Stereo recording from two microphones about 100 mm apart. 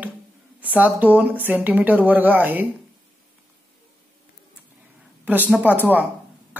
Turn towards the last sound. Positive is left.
turn(degrees=-15)  # may be behind; listen again after turning